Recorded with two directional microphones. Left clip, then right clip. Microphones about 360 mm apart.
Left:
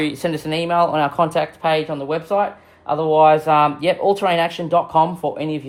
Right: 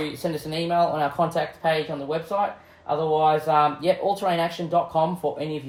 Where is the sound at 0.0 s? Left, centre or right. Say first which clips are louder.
Left 6 dB; left.